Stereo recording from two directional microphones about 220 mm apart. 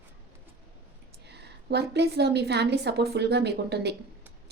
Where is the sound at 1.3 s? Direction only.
50° right (ahead or behind).